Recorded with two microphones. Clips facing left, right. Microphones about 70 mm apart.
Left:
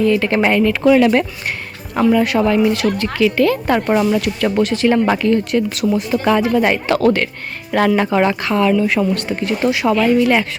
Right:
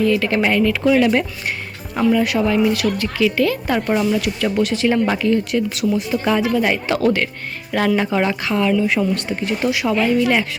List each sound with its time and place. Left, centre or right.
0.0 s speech: left
0.9 s speech: left
2.1 s speech: left
5.9 s speech: left
6.4 s speech: left